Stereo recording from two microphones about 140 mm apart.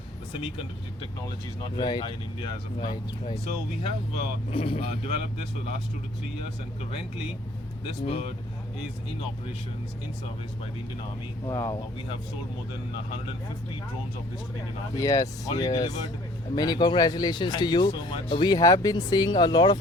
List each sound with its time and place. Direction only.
1.7 s speech: 30° left (ahead or behind)
4.5 s speech: 40° left (ahead or behind)
7.9 s speech: 40° left (ahead or behind)
11.4 s speech: 20° left (ahead or behind)
14.9 s speech: 25° left (ahead or behind)